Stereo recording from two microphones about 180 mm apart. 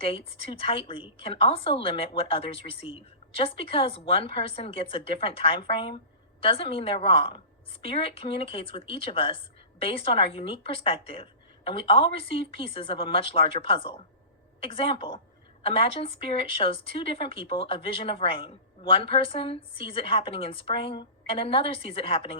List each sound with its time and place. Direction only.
0.0 s speech: 30° left (ahead or behind)